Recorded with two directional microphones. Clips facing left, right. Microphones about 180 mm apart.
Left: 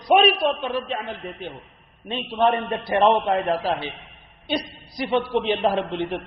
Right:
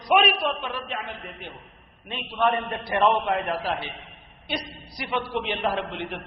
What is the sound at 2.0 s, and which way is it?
A man's voice, 30° left (ahead or behind).